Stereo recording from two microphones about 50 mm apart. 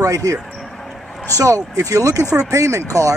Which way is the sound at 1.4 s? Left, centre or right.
Right.